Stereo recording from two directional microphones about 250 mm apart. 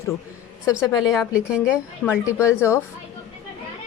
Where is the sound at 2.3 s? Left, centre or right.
Centre.